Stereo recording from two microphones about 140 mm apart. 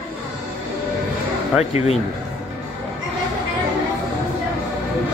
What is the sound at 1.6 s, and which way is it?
Speech, 50° left (ahead or behind).